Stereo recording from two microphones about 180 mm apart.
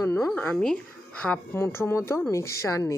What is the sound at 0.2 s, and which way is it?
A woman's voice, 5° left (ahead or behind).